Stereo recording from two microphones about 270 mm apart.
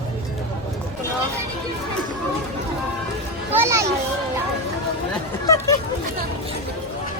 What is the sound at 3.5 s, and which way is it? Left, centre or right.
Speech, centre.